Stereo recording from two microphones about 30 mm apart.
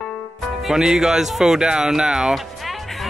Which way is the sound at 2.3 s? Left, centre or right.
Centre.